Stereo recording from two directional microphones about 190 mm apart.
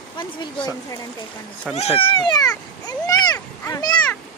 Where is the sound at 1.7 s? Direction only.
30° left (ahead or behind).